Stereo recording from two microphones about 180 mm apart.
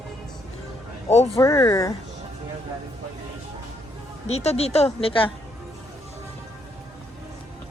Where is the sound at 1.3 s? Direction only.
15° left (ahead or behind).